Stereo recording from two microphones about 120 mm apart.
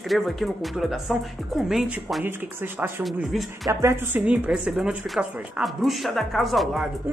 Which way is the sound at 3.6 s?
20° right (ahead or behind).